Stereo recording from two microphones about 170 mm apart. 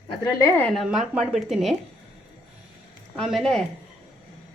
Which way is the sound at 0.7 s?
Centre (ahead or behind).